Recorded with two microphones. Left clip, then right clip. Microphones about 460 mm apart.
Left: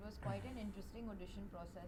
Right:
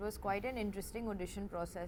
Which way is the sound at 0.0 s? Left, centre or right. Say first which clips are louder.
Right 11 dB; right.